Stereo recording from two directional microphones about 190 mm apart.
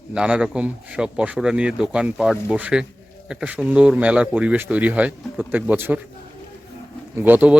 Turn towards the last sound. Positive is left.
turn(degrees=-10)  # may be behind; listen again after turning